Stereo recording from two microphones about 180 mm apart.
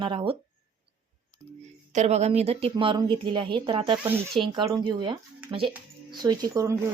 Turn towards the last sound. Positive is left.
turn(degrees=-15)  # may be behind; listen again after turning